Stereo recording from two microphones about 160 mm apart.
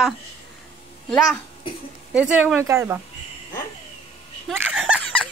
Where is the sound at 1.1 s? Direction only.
5° left (ahead or behind).